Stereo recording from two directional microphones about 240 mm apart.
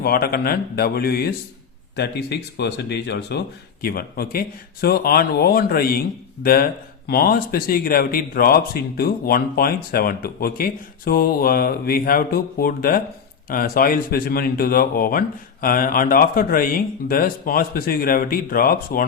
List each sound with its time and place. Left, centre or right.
0.0 s speech: left